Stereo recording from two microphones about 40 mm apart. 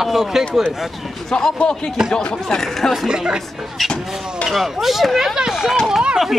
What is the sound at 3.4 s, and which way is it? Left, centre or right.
Speech, centre.